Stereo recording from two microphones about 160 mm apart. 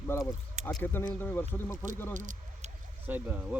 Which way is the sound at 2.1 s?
50° right (ahead or behind).